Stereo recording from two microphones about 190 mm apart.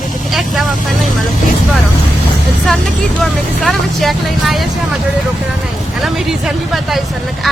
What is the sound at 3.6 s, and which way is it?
Speech, centre (ahead or behind).